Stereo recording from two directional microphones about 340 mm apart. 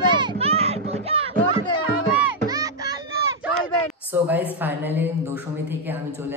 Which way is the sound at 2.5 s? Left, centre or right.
Centre.